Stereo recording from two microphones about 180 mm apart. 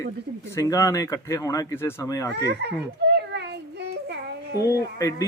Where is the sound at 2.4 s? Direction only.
65° right (ahead or behind).